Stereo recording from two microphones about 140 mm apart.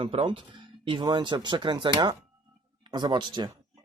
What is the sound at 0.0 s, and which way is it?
Speech, 40° right (ahead or behind).